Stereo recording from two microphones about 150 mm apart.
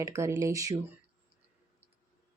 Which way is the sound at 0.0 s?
20° right (ahead or behind).